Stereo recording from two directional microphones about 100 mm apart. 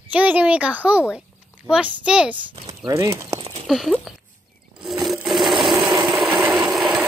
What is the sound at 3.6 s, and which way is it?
Speech, centre (ahead or behind).